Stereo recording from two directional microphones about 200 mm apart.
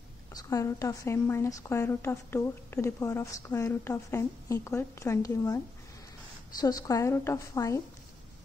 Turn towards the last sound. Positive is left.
turn(degrees=15)  # may be behind; listen again after turning